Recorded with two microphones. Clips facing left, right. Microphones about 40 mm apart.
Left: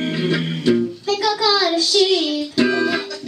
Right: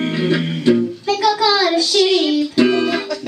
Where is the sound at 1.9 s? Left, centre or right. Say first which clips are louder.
Right 2 dB; right.